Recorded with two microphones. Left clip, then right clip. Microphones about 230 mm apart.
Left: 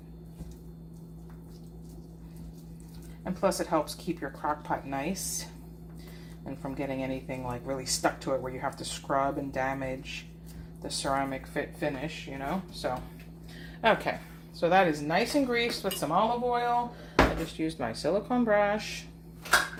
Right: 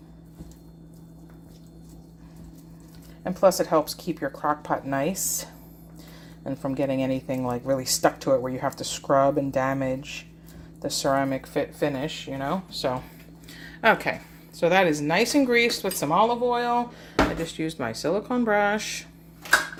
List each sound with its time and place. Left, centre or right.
3.4 s speech: right
6.4 s speech: right
13.8 s speech: right
17.6 s speech: right